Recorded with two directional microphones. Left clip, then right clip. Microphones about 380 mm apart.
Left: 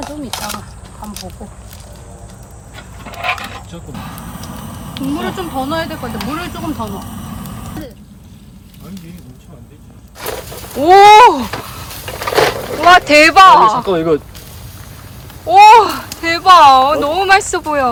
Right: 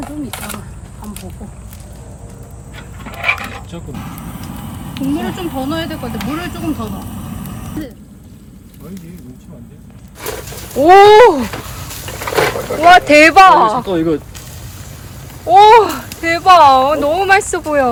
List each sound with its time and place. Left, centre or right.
0.0 s speech: centre
2.7 s coin: centre
4.9 s speech: centre
10.2 s a sound: left
10.4 s a sound: centre
10.8 s speech: centre
11.1 s speech: centre
11.6 s a sound: centre
12.0 s a sound: left
12.8 s speech: centre
13.8 s speech: centre
15.7 s speech: centre